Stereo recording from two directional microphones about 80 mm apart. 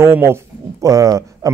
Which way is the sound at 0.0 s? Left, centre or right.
Right.